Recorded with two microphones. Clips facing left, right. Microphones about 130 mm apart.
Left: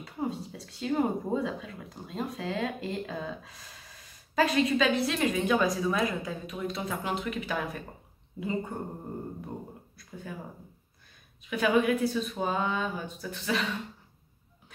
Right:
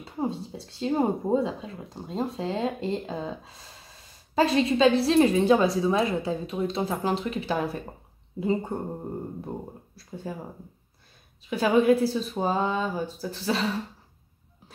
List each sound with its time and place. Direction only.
0.0 s speech: 30° right (ahead or behind)
9.9 s speech: 30° right (ahead or behind)
11.4 s speech: 30° right (ahead or behind)